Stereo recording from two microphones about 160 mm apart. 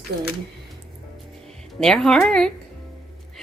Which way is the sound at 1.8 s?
5° left (ahead or behind).